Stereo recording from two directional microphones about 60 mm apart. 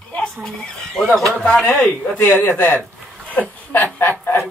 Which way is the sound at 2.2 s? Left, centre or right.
Left.